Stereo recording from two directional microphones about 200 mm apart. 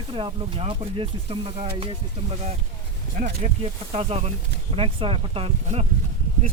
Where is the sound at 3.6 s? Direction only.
30° right (ahead or behind).